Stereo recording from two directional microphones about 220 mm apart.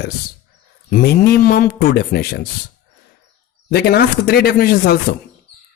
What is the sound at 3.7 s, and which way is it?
Speech, 45° left (ahead or behind).